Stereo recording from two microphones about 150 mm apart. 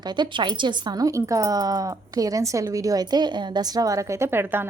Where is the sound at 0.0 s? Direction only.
30° right (ahead or behind).